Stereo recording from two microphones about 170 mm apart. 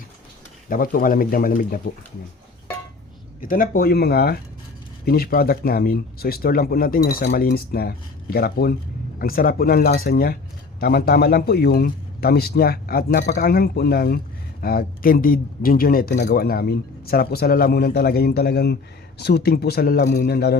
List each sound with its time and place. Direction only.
0.7 s speech: 55° left (ahead or behind)
3.4 s speech: 55° left (ahead or behind); by 20.6 s 70° left (ahead or behind)